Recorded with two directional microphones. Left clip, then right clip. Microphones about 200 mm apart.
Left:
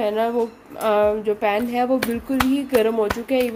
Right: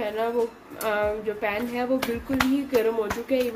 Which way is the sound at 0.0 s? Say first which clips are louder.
Left 5 dB; 50° left (ahead or behind).